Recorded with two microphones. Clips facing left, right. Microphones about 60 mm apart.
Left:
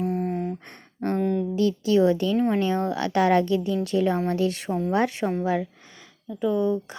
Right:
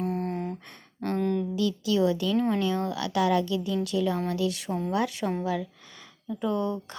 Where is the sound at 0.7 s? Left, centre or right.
Left.